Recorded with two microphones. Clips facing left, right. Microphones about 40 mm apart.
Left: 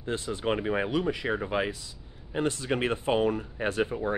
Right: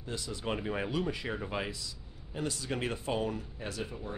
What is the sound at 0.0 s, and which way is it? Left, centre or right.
Speech, left.